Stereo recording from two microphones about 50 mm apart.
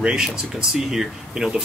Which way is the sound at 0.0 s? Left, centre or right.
Centre.